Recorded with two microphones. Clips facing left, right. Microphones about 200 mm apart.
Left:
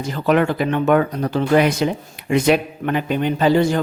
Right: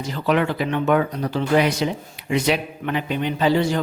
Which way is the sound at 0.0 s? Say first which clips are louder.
Left 3 dB; 50° left (ahead or behind).